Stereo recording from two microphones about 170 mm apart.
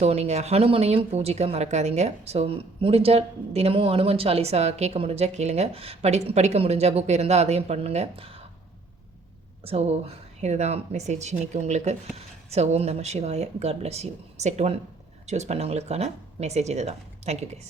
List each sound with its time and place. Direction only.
0.0 s speech: 40° right (ahead or behind)
9.6 s speech: 35° right (ahead or behind)